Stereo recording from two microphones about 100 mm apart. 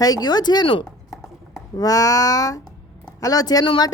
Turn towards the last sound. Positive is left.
turn(degrees=40)  # may be behind; listen again after turning